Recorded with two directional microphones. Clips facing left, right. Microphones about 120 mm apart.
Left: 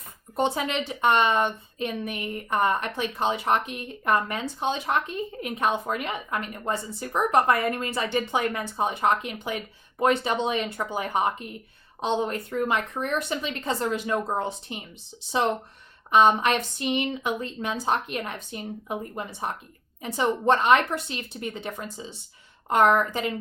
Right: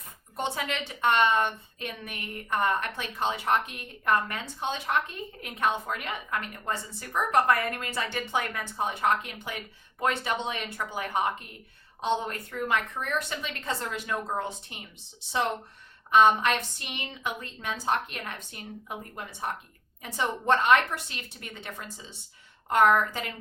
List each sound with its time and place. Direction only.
0.3 s a woman's voice: 20° left (ahead or behind)